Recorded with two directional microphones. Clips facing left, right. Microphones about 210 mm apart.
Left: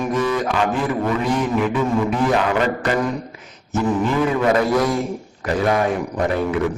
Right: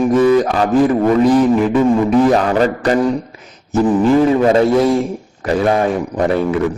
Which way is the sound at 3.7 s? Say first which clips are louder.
Right 7 dB; 30° right (ahead or behind).